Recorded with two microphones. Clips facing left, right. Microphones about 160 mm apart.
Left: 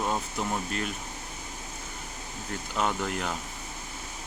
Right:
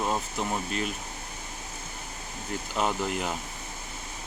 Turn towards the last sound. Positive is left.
turn(degrees=-5)  # may be behind; listen again after turning